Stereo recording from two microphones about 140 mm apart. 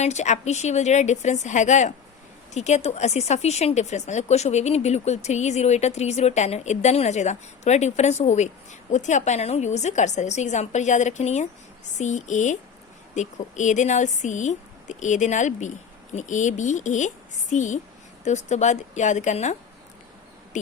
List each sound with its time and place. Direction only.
0.0 s a woman's voice: 55° left (ahead or behind)